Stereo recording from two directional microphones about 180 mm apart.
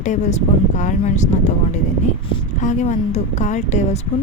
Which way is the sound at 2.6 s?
45° left (ahead or behind).